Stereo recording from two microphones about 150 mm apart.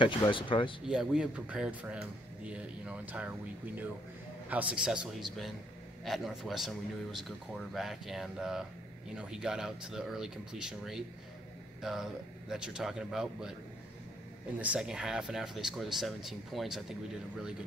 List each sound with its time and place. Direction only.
0.0 s speech: 35° left (ahead or behind)
0.8 s speech: 5° right (ahead or behind)
14.6 s speech: 5° right (ahead or behind)